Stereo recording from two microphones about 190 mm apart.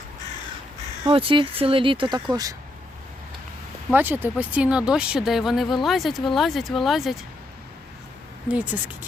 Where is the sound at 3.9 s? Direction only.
10° right (ahead or behind).